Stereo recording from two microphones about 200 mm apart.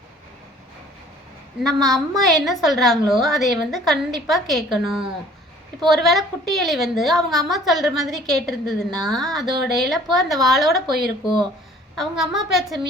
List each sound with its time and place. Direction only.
1.6 s a woman's voice: centre (ahead or behind)
11.9 s a woman's voice: centre (ahead or behind)